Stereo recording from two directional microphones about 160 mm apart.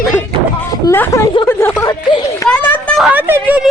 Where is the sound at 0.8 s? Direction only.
15° left (ahead or behind).